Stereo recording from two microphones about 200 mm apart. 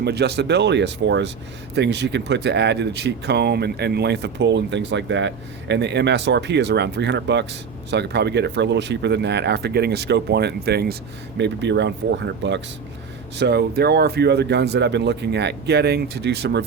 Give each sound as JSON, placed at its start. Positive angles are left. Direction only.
{"t": 0.0, "sound": "speech", "side_deg": -55}